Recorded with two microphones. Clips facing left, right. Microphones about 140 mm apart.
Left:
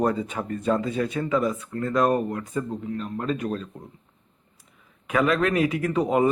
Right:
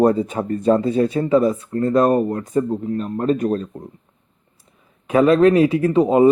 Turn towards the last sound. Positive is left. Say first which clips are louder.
# right 8 dB
turn(degrees=-25)  # may be behind; listen again after turning